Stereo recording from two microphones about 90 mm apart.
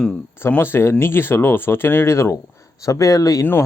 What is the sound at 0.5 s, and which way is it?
Speech, 25° left (ahead or behind).